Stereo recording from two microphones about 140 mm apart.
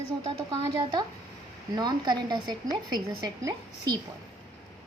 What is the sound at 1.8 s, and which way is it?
A woman's voice, 30° right (ahead or behind).